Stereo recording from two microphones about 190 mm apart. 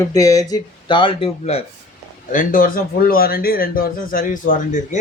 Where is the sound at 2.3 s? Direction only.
45° left (ahead or behind).